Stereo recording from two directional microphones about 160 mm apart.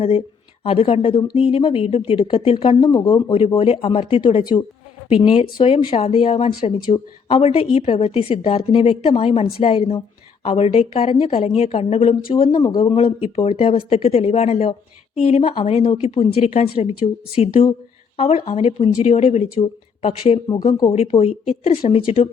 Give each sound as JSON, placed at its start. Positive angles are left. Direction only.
{"t": 0.6, "sound": "a woman's voice", "side_deg": 35}